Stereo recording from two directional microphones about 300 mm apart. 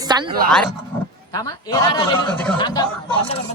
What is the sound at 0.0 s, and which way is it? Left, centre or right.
Speech, centre.